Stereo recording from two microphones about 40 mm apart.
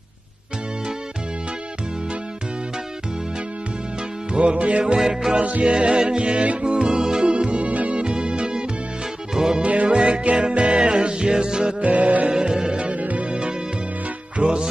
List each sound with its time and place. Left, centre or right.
4.3 s music: right
4.9 s music: centre
5.4 s music: right; by 9.6 s centre
9.6 s music: right
9.8 s music: right
11.8 s music: right
12.3 s music: centre
13.0 s music: right
13.3 s music: right